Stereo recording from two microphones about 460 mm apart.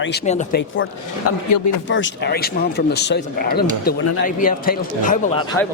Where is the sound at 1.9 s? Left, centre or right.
Left.